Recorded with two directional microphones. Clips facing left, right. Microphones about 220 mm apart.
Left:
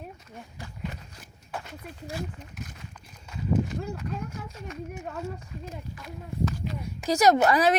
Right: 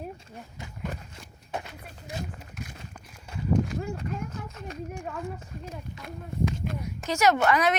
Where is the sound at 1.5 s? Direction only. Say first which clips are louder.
Right 3 dB; 20° right (ahead or behind).